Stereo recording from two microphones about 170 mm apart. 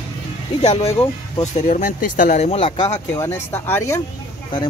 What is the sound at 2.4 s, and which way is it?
Speech, 35° left (ahead or behind).